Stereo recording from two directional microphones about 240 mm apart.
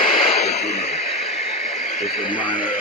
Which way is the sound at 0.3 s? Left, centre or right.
Left.